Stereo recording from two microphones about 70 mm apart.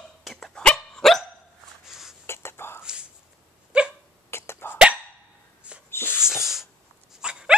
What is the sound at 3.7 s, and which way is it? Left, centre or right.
Dog, centre.